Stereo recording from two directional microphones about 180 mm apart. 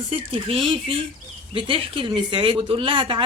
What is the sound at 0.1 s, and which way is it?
A woman's voice, 30° right (ahead or behind).